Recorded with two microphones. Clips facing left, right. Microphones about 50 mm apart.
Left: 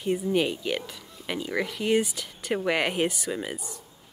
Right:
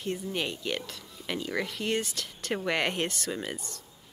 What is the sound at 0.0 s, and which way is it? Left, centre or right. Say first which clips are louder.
Speech: left 7 dB; centre.